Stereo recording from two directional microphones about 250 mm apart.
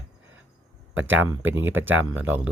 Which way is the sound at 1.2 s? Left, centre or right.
Centre.